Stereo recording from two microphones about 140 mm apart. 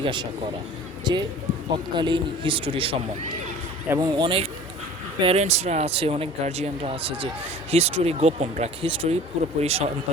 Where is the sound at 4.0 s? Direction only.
35° right (ahead or behind).